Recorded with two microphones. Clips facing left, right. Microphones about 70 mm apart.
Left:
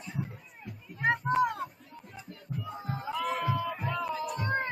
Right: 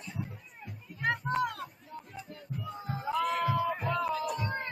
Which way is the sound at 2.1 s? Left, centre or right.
Centre.